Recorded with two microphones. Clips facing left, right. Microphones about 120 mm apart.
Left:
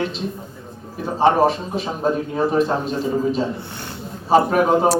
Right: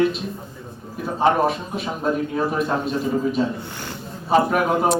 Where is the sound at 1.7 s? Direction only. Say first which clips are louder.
Left 2 dB; 30° left (ahead or behind).